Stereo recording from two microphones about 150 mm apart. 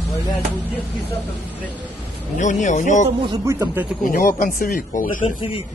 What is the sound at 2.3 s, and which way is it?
Speech, 55° left (ahead or behind).